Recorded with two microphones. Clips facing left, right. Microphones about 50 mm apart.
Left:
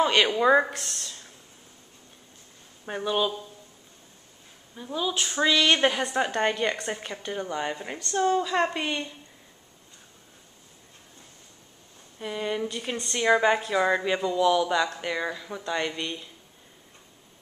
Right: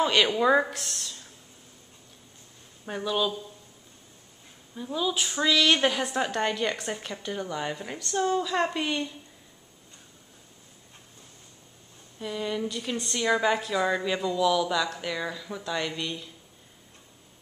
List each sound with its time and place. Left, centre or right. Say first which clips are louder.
0.0 s a woman's voice: left 1 dB; centre
2.8 s a woman's voice: left 1 dB; centre
4.7 s a woman's voice: even; centre
5.4 s a woman's voice: left 1 dB; centre
12.2 s a woman's voice: left 1 dB; centre